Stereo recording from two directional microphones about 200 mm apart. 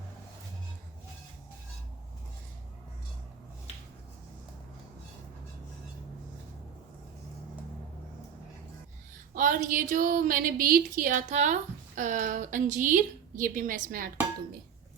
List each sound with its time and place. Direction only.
9.3 s a woman's voice: 40° right (ahead or behind)